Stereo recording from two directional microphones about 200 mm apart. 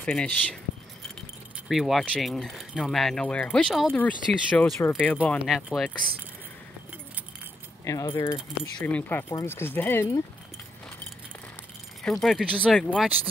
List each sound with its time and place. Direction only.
0.0 s speech: 5° left (ahead or behind)
1.7 s speech: centre (ahead or behind)
7.8 s speech: 15° left (ahead or behind)
12.0 s speech: 5° left (ahead or behind)